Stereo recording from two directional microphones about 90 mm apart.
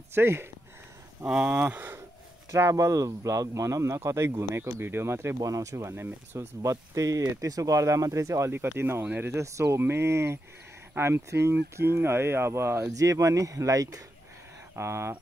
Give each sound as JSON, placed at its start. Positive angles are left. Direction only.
{"t": 0.1, "sound": "speech", "side_deg": -25}
{"t": 1.2, "sound": "speech", "side_deg": -15}
{"t": 2.5, "sound": "speech", "side_deg": -35}
{"t": 6.6, "sound": "speech", "side_deg": -35}